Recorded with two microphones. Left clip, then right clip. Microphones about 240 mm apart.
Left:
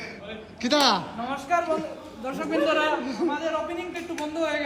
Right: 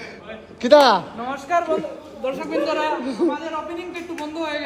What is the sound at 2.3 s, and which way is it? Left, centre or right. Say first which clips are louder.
Speech: right 2 dB; centre.